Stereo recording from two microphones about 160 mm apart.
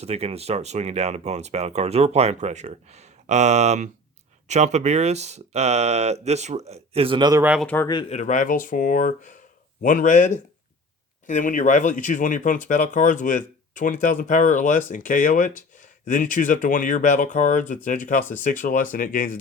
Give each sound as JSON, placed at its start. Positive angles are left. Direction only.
{"t": 0.0, "sound": "speech", "side_deg": -40}
{"t": 7.6, "sound": "speech", "side_deg": 10}
{"t": 8.1, "sound": "speech", "side_deg": 50}